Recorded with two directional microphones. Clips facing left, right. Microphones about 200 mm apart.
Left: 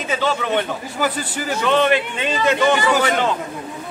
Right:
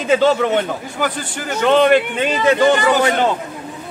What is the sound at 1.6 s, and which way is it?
Speech, 50° right (ahead or behind).